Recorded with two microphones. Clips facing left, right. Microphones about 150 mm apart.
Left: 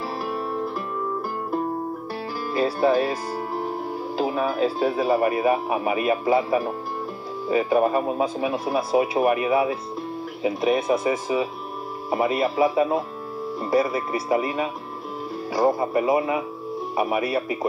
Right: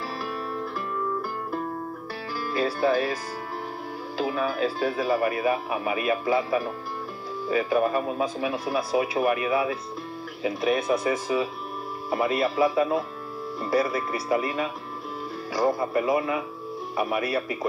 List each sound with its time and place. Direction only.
0.2 s music: 20° left (ahead or behind)
2.4 s speech: 25° left (ahead or behind)
17.2 s speech: 25° left (ahead or behind)